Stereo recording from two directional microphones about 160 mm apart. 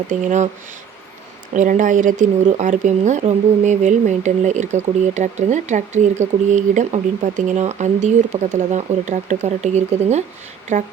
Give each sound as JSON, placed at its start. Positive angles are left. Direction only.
{"t": 0.1, "sound": "speech", "side_deg": -50}
{"t": 1.5, "sound": "speech", "side_deg": -55}